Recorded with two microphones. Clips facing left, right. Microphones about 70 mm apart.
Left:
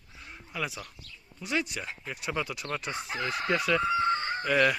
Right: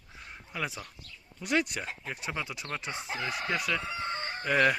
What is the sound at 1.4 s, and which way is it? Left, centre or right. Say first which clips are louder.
Speech: right 2 dB; right.